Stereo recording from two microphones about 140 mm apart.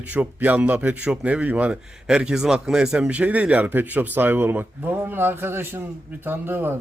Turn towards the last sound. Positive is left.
turn(degrees=-15)  # may be behind; listen again after turning